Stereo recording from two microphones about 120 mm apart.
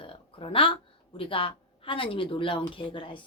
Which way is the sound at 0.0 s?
50° left (ahead or behind).